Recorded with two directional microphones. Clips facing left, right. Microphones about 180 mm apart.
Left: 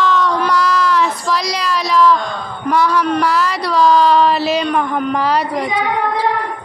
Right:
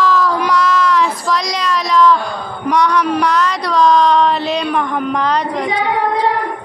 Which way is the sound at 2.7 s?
5° left (ahead or behind).